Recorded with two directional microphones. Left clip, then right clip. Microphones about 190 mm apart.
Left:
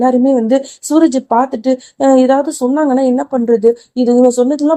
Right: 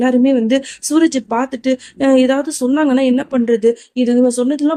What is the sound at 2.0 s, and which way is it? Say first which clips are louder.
Speech: left 4 dB; 30° right (ahead or behind).